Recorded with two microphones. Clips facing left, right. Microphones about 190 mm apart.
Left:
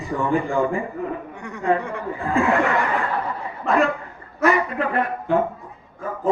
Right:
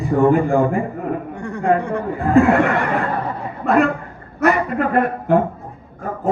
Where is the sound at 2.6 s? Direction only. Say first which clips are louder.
Right 3 dB; 60° right (ahead or behind).